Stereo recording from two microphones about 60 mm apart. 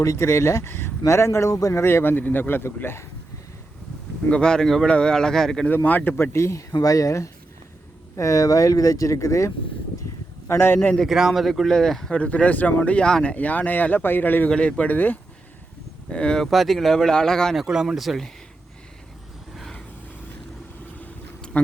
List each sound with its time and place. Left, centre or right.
0.0 s speech: left
1.7 s speech: left
4.3 s speech: centre
5.6 s speech: left
6.3 s speech: left
10.5 s speech: left
11.1 s speech: centre
12.1 s speech: left
14.5 s speech: centre
14.9 s speech: left
16.0 s speech: centre
16.5 s speech: centre
17.6 s speech: centre
21.5 s duck: left